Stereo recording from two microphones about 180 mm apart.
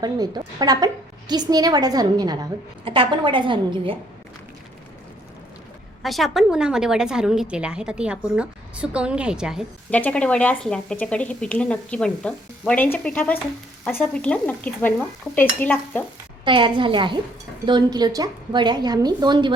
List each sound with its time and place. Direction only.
0.0 s a woman's voice: 20° right (ahead or behind)
6.0 s a woman's voice: centre (ahead or behind)
9.9 s a woman's voice: 5° left (ahead or behind)
16.4 s a woman's voice: 25° right (ahead or behind)